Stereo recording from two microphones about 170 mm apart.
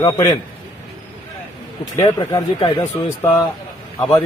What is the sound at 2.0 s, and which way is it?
Speech, 20° left (ahead or behind).